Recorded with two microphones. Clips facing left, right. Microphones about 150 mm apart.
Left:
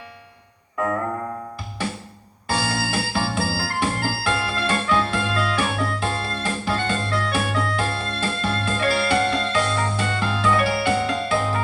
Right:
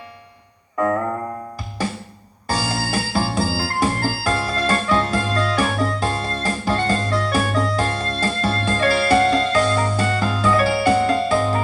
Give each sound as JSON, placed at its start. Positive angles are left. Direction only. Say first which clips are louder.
{"t": 2.5, "sound": "music", "louder": "right 1 dB", "side_deg": -40}